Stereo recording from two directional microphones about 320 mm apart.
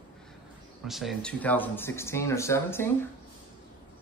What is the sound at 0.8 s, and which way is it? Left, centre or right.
Speech, centre.